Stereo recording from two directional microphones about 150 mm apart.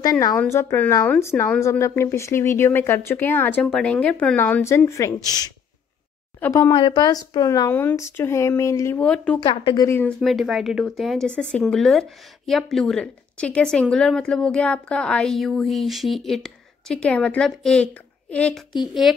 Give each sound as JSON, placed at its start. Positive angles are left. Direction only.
{"t": 0.0, "sound": "speech", "side_deg": 25}
{"t": 6.5, "sound": "speech", "side_deg": 30}
{"t": 9.0, "sound": "speech", "side_deg": 5}
{"t": 9.4, "sound": "speech", "side_deg": 35}
{"t": 9.8, "sound": "speech", "side_deg": 20}
{"t": 10.0, "sound": "a woman's voice", "side_deg": 0}